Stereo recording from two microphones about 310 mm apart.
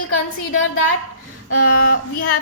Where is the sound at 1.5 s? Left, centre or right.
Left.